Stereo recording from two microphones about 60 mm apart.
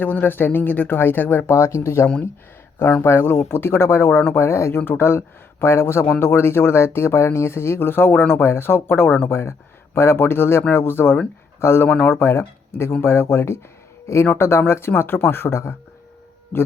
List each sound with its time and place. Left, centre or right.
0.0 s speech: left
1.5 s speech: left